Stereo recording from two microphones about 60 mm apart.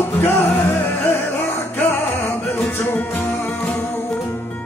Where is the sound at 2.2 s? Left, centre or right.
Left.